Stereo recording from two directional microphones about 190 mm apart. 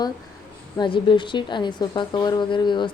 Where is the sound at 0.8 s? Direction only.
25° left (ahead or behind).